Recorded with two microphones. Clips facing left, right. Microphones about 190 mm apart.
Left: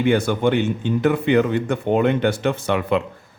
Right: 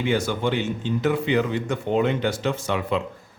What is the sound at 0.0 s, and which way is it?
A man's voice, 55° left (ahead or behind).